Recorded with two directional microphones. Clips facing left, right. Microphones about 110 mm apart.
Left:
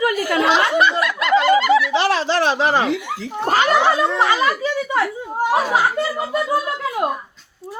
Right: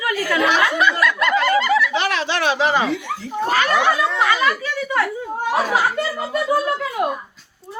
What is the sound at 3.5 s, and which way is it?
Speech, 30° left (ahead or behind).